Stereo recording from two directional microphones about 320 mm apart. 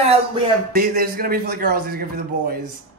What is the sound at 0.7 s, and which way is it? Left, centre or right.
A man's voice, right.